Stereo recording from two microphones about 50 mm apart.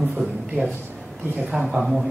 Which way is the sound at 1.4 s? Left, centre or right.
Right.